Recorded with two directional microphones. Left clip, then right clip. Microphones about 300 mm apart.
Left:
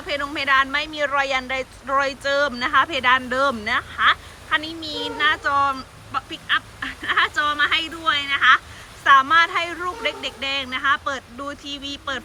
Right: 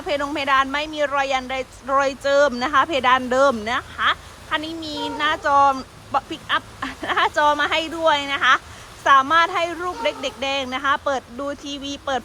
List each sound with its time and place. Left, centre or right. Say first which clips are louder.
0.1 s a woman's voice: even; centre